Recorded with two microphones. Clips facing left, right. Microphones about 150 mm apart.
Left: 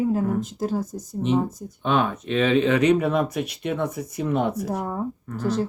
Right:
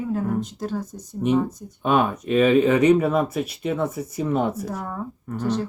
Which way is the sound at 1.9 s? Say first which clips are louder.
Right 2 dB; 10° right (ahead or behind).